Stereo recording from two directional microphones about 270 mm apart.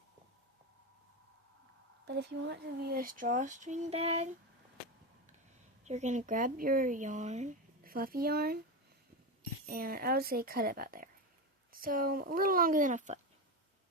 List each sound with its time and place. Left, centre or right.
2.0 s speech: right
5.8 s speech: right
9.6 s a woman's voice: right